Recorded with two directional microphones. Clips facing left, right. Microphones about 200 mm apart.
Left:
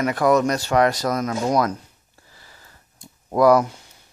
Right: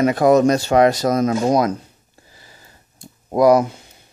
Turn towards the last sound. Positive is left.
turn(degrees=-20)  # may be behind; listen again after turning